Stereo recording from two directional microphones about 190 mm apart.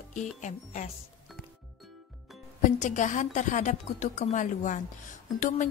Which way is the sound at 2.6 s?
40° left (ahead or behind).